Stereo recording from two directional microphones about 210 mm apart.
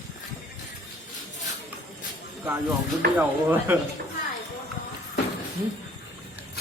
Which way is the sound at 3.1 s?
10° right (ahead or behind).